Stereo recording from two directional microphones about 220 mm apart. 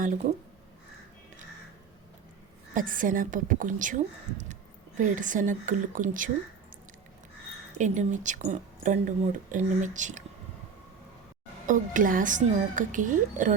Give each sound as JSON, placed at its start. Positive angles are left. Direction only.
{"t": 2.7, "sound": "speech", "side_deg": -40}
{"t": 7.8, "sound": "speech", "side_deg": -35}
{"t": 11.6, "sound": "speech", "side_deg": -35}